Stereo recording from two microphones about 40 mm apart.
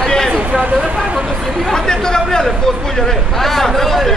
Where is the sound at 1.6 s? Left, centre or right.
Centre.